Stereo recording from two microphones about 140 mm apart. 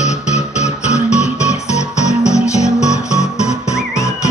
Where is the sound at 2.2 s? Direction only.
20° left (ahead or behind).